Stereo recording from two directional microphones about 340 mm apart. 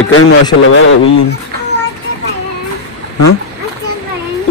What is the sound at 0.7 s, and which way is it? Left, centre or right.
Speech, left.